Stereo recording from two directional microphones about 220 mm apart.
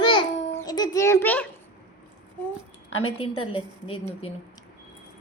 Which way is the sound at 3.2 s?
25° left (ahead or behind).